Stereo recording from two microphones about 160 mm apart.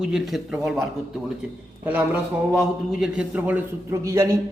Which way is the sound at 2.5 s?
5° right (ahead or behind).